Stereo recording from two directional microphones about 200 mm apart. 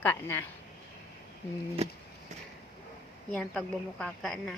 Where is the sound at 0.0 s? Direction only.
10° left (ahead or behind).